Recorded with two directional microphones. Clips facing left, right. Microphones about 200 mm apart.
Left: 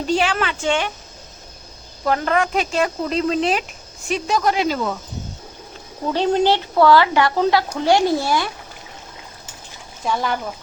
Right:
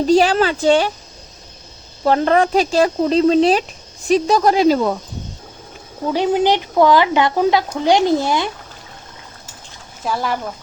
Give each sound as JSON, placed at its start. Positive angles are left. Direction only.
{"t": 0.0, "sound": "a woman's voice", "side_deg": -40}
{"t": 2.0, "sound": "a woman's voice", "side_deg": -30}
{"t": 6.1, "sound": "speech", "side_deg": -10}
{"t": 10.0, "sound": "speech", "side_deg": 0}